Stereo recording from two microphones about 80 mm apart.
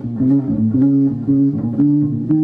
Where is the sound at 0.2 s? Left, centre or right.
Centre.